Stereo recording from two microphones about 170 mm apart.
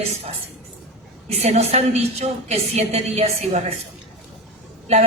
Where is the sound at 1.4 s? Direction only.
40° right (ahead or behind).